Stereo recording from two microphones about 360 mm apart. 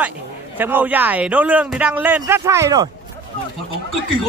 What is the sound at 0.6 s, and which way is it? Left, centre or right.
Speech, centre.